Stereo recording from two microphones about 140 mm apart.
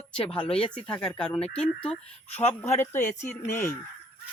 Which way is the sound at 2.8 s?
15° left (ahead or behind).